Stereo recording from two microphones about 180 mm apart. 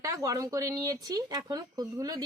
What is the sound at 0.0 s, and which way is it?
Speech, 20° right (ahead or behind).